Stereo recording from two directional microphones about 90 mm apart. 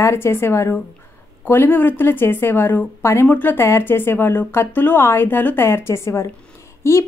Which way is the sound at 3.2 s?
20° left (ahead or behind).